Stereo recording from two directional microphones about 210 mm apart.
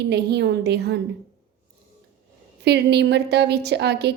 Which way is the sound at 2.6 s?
55° right (ahead or behind).